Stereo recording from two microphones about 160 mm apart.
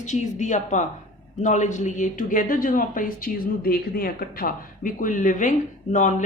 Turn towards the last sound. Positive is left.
turn(degrees=50)  # may be behind; listen again after turning